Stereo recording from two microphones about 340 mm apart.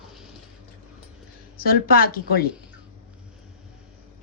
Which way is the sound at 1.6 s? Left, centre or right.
Left.